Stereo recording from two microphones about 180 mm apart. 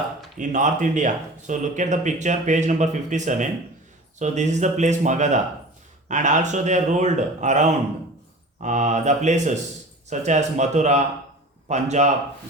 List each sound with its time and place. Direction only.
0.3 s a man's voice: 45° right (ahead or behind)